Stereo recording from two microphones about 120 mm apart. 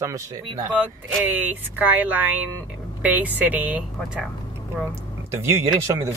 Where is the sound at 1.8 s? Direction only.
15° right (ahead or behind).